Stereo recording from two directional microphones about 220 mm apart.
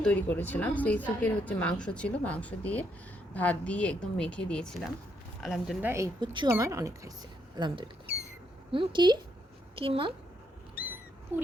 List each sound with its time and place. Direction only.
0.0 s a woman's voice: 5° left (ahead or behind); by 10.1 s 25° right (ahead or behind)
11.3 s speech: 10° right (ahead or behind)